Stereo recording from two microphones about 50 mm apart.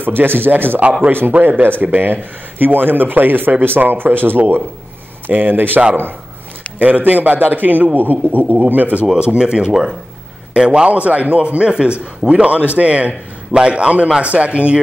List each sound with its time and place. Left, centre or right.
0.0 s a man's voice: right
6.8 s a man's voice: right
9.2 s a man's voice: centre